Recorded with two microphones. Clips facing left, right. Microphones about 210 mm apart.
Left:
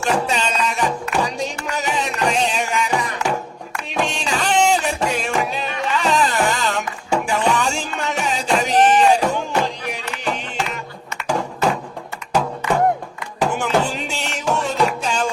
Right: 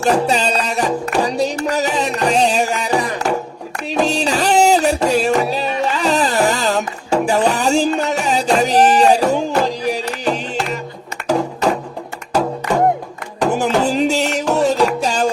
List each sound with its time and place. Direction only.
0.0 s music: 35° right (ahead or behind)
11.3 s a sound: 35° right (ahead or behind)
13.4 s music: 40° right (ahead or behind)